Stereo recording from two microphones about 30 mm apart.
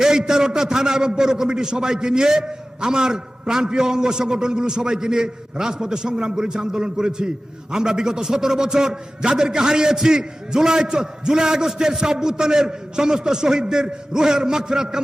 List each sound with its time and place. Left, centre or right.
0.0 s a man's voice: centre